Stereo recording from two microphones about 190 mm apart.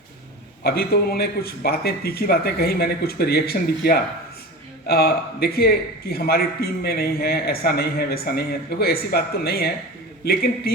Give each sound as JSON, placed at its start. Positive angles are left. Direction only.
{"t": 0.6, "sound": "a man's voice", "side_deg": 55}